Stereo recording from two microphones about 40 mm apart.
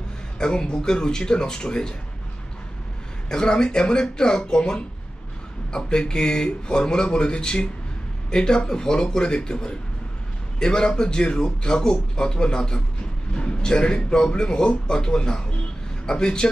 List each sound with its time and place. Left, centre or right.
0.4 s a man's voice: centre
3.3 s a man's voice: centre